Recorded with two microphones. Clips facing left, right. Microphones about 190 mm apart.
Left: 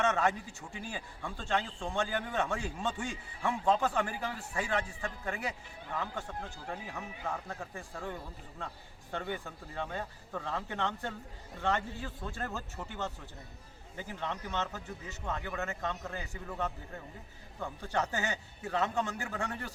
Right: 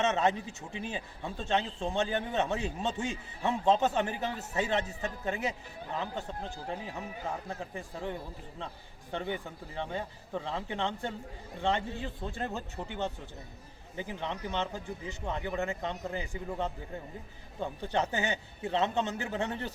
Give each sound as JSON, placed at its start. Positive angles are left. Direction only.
{"t": 0.0, "sound": "a man's voice", "side_deg": -20}